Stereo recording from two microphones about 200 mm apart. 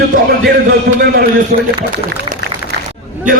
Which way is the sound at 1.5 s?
30° right (ahead or behind).